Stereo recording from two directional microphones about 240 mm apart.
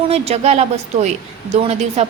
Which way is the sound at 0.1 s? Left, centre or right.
Right.